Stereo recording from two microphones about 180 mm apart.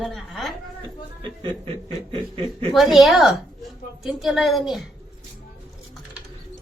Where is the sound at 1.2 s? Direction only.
30° right (ahead or behind).